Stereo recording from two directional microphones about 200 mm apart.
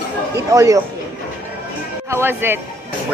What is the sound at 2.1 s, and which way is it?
Speech, 10° right (ahead or behind).